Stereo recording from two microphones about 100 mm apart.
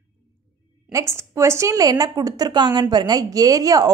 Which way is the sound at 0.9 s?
30° right (ahead or behind).